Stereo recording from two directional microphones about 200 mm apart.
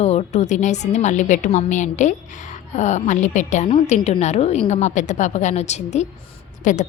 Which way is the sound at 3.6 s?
25° left (ahead or behind).